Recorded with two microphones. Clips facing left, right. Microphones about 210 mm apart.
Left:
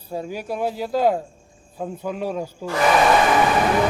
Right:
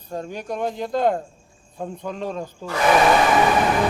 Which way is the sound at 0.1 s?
5° left (ahead or behind).